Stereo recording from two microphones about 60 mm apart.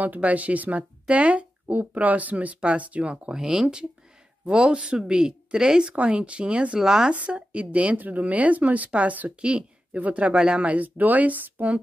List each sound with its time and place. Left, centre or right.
0.0 s speech: right; by 7.2 s centre
7.2 s speech: right